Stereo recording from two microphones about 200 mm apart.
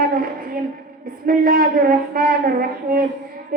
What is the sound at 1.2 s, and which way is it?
Speech, 45° right (ahead or behind).